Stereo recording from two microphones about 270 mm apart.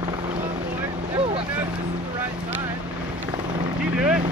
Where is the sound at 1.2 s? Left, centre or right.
Right.